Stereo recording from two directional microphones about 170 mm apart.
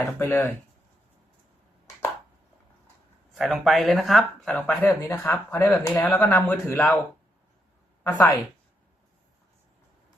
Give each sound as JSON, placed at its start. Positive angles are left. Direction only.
{"t": 0.0, "sound": "speech", "side_deg": 15}
{"t": 3.3, "sound": "speech", "side_deg": 0}
{"t": 8.0, "sound": "a woman's voice", "side_deg": 10}